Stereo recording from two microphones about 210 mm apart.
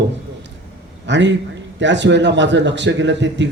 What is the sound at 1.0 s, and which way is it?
A man's voice, 60° right (ahead or behind).